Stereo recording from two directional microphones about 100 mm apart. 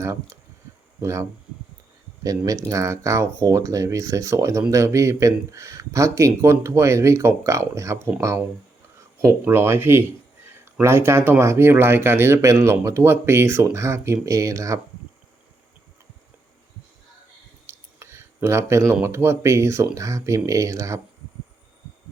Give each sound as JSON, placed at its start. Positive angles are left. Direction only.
{"t": 0.0, "sound": "speech", "side_deg": -30}
{"t": 9.4, "sound": "speech", "side_deg": -25}
{"t": 17.7, "sound": "a sound", "side_deg": -25}
{"t": 19.0, "sound": "speech", "side_deg": -25}